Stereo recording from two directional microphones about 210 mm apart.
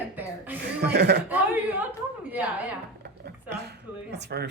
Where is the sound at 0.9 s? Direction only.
50° right (ahead or behind).